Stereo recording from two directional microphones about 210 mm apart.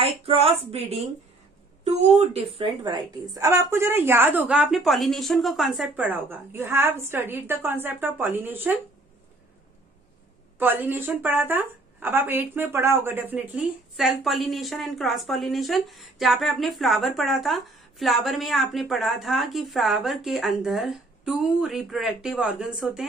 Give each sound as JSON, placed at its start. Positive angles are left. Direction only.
{"t": 0.0, "sound": "a woman's voice", "side_deg": -25}
{"t": 10.6, "sound": "a woman's voice", "side_deg": -10}